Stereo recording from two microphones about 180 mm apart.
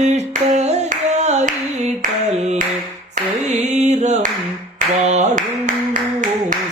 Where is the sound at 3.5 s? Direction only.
40° right (ahead or behind).